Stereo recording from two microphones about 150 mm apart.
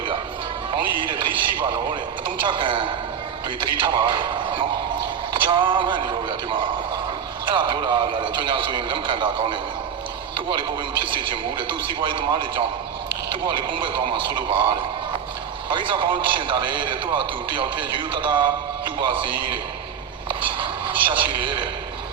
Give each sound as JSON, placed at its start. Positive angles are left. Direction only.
{"t": 0.7, "sound": "radio", "side_deg": -35}
{"t": 3.6, "sound": "a man's voice", "side_deg": -30}
{"t": 11.0, "sound": "a man's voice", "side_deg": -35}
{"t": 15.7, "sound": "a man's voice", "side_deg": -35}
{"t": 21.1, "sound": "a man's voice", "side_deg": -35}